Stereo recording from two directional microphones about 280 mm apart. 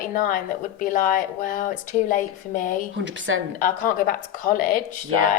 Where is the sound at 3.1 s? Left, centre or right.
Right.